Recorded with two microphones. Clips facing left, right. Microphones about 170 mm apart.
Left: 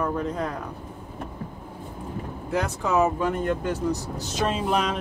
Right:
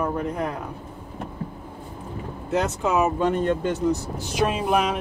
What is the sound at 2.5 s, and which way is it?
Speech, 20° right (ahead or behind).